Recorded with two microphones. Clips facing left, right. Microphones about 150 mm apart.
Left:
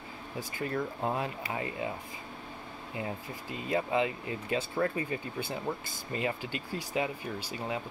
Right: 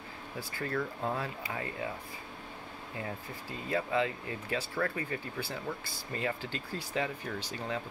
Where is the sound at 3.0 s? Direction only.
20° left (ahead or behind).